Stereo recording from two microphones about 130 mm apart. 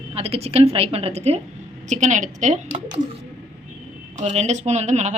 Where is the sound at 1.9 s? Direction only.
70° right (ahead or behind).